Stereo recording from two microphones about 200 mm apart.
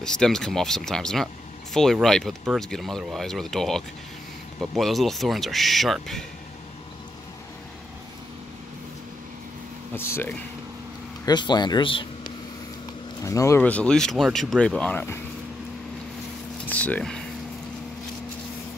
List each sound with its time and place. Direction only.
0.0 s speech: 5° left (ahead or behind)
9.9 s speech: 10° left (ahead or behind)
16.6 s speech: 10° left (ahead or behind)